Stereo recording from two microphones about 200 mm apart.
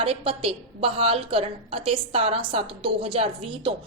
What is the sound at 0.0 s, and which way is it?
A woman's voice, 30° right (ahead or behind).